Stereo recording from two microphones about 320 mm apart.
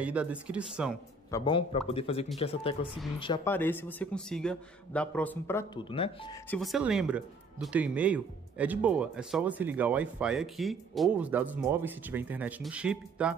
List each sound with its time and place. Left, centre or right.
0.0 s speech: centre
1.3 s a man's voice: centre
6.5 s speech: centre